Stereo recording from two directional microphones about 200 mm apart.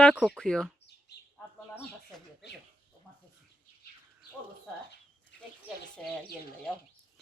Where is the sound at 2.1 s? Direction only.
Centre (ahead or behind).